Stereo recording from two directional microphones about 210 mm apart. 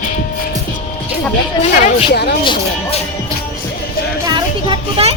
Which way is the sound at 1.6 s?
35° left (ahead or behind).